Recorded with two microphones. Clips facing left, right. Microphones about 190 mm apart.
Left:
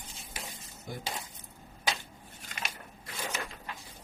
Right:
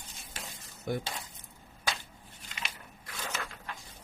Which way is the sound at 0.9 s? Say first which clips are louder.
Right 8 dB; 65° right (ahead or behind).